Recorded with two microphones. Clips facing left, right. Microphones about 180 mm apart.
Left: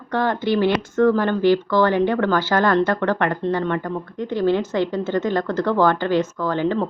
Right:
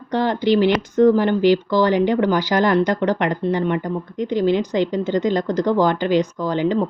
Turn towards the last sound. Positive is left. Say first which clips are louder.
# right 2 dB
turn(degrees=-15)  # may be behind; listen again after turning